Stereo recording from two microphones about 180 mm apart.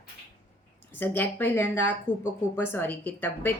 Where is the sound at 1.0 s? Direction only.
10° left (ahead or behind).